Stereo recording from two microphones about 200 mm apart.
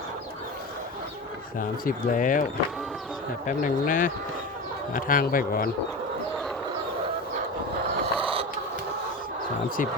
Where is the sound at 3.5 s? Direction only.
45° left (ahead or behind).